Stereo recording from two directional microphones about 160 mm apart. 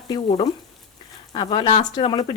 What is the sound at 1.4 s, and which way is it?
Speech, 30° left (ahead or behind).